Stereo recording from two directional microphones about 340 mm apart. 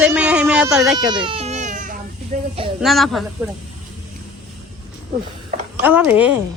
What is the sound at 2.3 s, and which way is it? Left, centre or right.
Speech, right.